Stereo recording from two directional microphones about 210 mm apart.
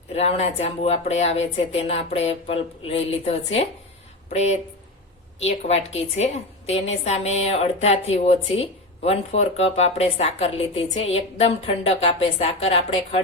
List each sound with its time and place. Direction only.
0.1 s a woman's voice: 30° left (ahead or behind)